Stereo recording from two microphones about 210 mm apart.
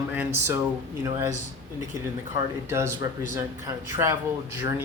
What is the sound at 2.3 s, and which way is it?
Speech, 15° right (ahead or behind).